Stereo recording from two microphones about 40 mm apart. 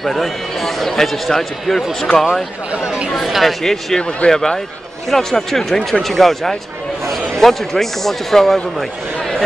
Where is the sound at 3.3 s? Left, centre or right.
Centre.